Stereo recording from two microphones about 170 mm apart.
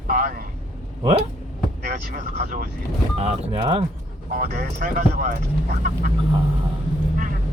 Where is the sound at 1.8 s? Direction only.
50° right (ahead or behind).